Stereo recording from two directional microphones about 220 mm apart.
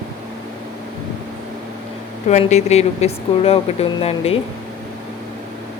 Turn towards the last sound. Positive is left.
turn(degrees=25)  # may be behind; listen again after turning